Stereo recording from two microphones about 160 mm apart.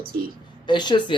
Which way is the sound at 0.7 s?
30° left (ahead or behind).